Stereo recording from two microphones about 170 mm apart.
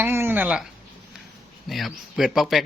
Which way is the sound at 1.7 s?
Centre (ahead or behind).